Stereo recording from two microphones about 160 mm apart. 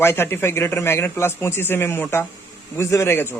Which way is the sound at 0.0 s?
15° left (ahead or behind).